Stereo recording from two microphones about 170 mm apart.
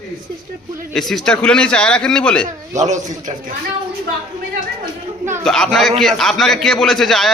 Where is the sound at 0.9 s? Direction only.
Centre (ahead or behind).